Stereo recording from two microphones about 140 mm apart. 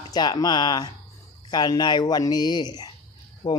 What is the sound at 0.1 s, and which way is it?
Speech, 30° left (ahead or behind).